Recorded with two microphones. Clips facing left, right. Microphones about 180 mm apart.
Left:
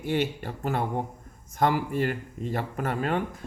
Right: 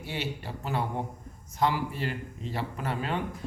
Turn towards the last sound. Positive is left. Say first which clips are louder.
# left 4 dB
turn(degrees=50)  # may be behind; listen again after turning